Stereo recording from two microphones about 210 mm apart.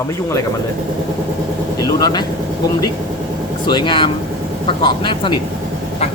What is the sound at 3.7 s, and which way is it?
Speech, 20° left (ahead or behind).